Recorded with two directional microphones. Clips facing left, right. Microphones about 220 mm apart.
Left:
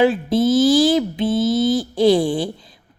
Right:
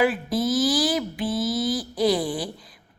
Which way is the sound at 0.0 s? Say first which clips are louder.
Left 6 dB; 25° left (ahead or behind).